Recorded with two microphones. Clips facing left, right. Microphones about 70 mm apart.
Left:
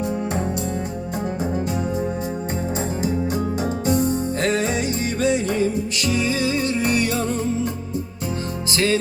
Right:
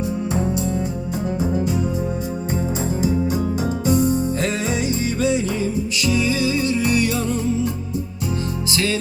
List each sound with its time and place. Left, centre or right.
3.0 s music: left
8.7 s music: left